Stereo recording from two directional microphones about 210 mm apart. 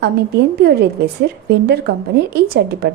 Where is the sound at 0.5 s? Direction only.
50° right (ahead or behind).